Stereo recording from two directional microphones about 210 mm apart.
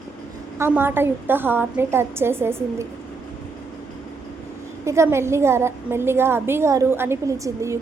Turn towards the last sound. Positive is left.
turn(degrees=-15)  # may be behind; listen again after turning